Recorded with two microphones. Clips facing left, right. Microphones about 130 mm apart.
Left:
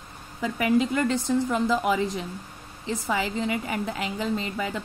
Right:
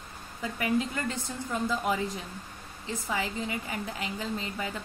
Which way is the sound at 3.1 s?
80° left.